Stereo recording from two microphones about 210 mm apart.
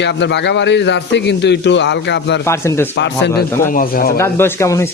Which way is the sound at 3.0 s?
55° left (ahead or behind).